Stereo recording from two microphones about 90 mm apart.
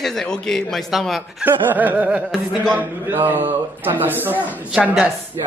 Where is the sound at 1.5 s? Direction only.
20° right (ahead or behind).